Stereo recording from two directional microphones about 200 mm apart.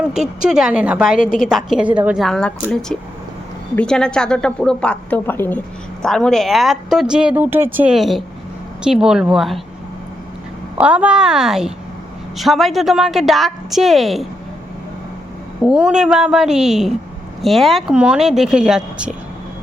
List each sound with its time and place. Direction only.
0.0 s a woman's voice: 5° right (ahead or behind)
1.1 s a woman's voice: 45° left (ahead or behind)
1.5 s a woman's voice: 5° right (ahead or behind)
3.8 s a woman's voice: 5° left (ahead or behind)
10.8 s a woman's voice: 5° right (ahead or behind)
15.6 s a woman's voice: 5° right (ahead or behind)